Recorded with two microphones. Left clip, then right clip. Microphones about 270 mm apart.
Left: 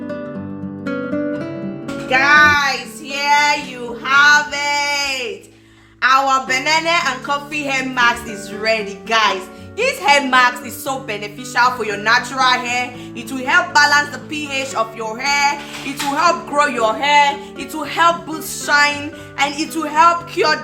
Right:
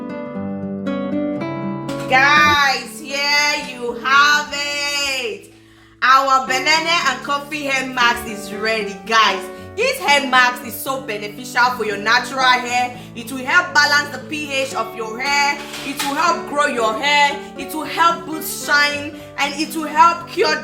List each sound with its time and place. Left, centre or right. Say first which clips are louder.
2.0 s music: left 1 dB; centre
3.1 s child singing: left 3 dB; centre
4.0 s a sound: left 2 dB; centre
6.0 s a woman's voice: right 1 dB; centre